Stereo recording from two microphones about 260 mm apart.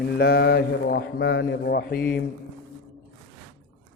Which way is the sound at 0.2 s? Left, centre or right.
Left.